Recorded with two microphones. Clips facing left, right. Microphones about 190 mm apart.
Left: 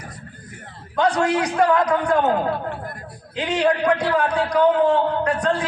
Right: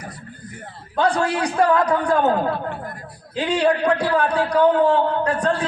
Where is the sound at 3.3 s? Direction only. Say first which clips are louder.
Right 1 dB; 30° right (ahead or behind).